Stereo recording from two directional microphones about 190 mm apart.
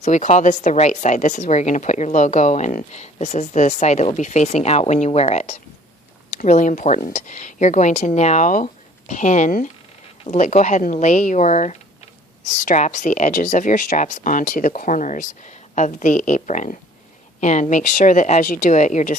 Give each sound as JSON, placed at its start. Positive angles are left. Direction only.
{"t": 0.0, "sound": "speech", "side_deg": 40}